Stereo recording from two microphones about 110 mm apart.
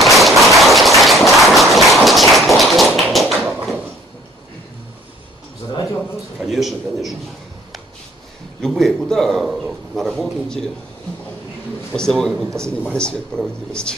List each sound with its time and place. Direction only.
0.0 s a sound: centre (ahead or behind)
3.0 s tap: centre (ahead or behind)
6.4 s a man's voice: centre (ahead or behind)
8.5 s a man's voice: 5° left (ahead or behind)
11.9 s a man's voice: 5° left (ahead or behind)